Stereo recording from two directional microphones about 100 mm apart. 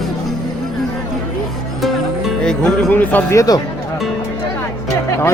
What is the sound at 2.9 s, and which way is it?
Speech, 15° left (ahead or behind).